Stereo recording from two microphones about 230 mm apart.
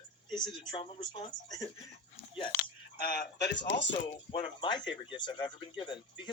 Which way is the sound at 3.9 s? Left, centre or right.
Left.